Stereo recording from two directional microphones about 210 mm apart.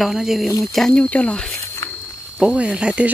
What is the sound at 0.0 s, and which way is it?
Speech, centre (ahead or behind).